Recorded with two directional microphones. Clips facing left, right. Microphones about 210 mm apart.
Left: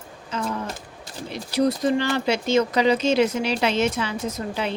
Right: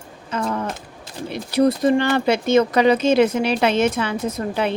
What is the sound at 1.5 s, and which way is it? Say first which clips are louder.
Speech: right 4 dB; 55° right (ahead or behind).